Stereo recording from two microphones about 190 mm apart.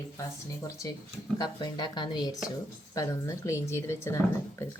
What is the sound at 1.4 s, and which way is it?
Speech, 20° left (ahead or behind).